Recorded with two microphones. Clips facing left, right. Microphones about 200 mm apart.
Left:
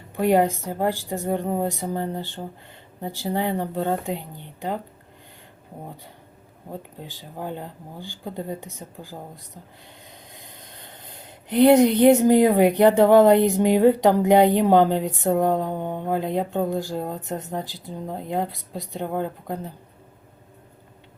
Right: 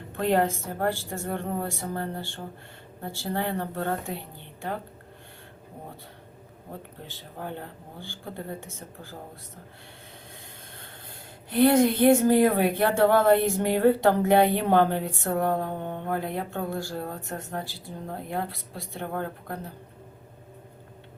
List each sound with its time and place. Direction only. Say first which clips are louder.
0.1 s a woman's voice: left 5 dB; 15° left (ahead or behind)
7.0 s a woman's voice: left 3 dB; 15° left (ahead or behind)
10.8 s a woman's voice: left 3 dB; 15° left (ahead or behind)